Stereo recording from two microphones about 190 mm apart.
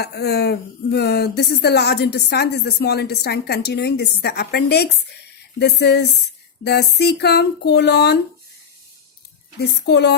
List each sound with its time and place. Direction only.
0.0 s speech: 60° left (ahead or behind)
9.6 s speech: 60° left (ahead or behind)